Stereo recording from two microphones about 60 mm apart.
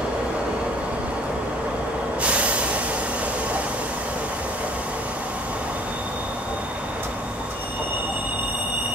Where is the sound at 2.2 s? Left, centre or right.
Right.